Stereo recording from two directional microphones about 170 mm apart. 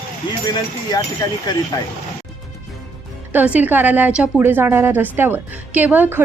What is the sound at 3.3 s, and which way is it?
A woman's voice, 10° right (ahead or behind).